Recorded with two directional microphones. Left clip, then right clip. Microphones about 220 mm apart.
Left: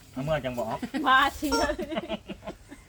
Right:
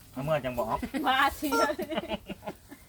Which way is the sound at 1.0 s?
25° left (ahead or behind).